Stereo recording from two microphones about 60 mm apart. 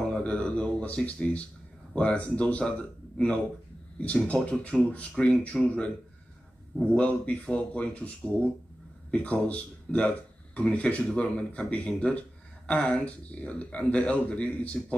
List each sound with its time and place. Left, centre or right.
0.2 s speech: centre
6.9 s speech: left